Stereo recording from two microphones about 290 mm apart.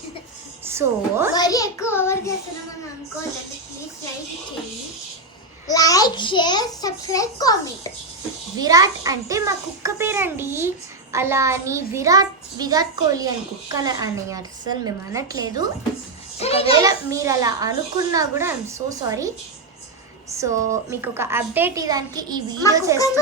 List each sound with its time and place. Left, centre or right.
0.6 s a woman's voice: centre
1.3 s a child's voice: centre
5.6 s a child's voice: centre
8.5 s a child's voice: centre
16.4 s a child's voice: centre
16.7 s a child's voice: centre
20.3 s a child's voice: centre
22.6 s a child's voice: centre